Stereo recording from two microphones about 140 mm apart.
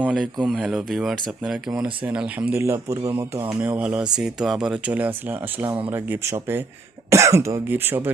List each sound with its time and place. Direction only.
0.0 s speech: 5° right (ahead or behind)
3.6 s speech: 10° right (ahead or behind)